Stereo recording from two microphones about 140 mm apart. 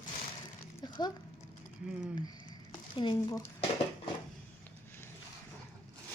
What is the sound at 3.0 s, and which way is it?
Speech, 30° left (ahead or behind).